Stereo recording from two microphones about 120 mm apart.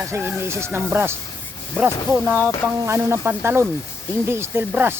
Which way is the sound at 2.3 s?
20° right (ahead or behind).